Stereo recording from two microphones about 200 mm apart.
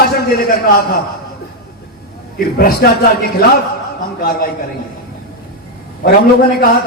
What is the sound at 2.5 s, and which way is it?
Speech, 50° left (ahead or behind).